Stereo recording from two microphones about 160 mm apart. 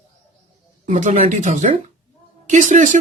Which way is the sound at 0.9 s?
50° right (ahead or behind).